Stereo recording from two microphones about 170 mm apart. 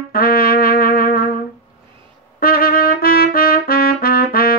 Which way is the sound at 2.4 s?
60° left (ahead or behind).